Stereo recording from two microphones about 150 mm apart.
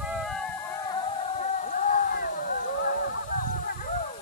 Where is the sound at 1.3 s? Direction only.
55° left (ahead or behind).